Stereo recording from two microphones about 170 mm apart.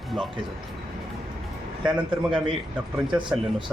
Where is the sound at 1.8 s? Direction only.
5° right (ahead or behind).